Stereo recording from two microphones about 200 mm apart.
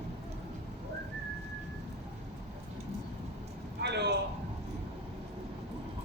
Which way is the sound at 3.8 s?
55° right (ahead or behind).